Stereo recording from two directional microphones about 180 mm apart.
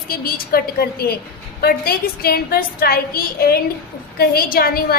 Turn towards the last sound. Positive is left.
turn(degrees=55)  # may be behind; listen again after turning